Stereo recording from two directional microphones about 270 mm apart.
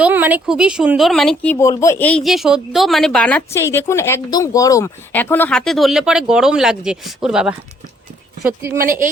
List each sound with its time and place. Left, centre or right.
0.0 s speech: centre
8.8 s speech: right